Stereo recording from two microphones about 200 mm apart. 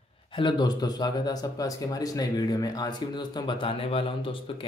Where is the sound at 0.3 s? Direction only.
25° left (ahead or behind).